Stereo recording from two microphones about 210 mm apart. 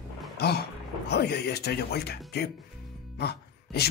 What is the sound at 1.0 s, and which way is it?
Speech, 50° left (ahead or behind).